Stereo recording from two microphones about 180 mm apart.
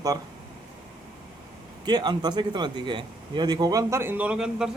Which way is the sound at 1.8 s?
25° right (ahead or behind).